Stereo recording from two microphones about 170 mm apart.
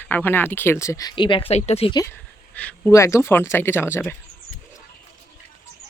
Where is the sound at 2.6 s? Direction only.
10° left (ahead or behind).